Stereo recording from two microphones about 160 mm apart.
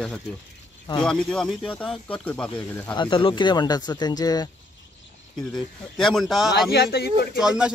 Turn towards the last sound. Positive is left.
turn(degrees=-5)  # may be behind; listen again after turning